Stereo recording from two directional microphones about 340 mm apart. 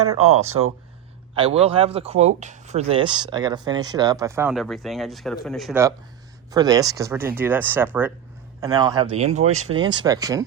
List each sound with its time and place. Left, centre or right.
1.4 s speech: centre
9.5 s speech: right
9.7 s speech: centre